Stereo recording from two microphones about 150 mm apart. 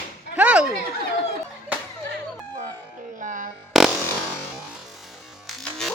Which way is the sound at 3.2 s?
60° right (ahead or behind).